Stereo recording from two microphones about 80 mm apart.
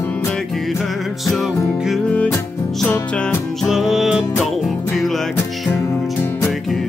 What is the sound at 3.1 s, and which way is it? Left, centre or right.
Music, centre.